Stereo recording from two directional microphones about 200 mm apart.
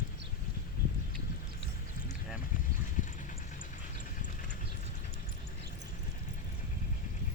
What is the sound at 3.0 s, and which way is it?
Vehicle, 40° left (ahead or behind).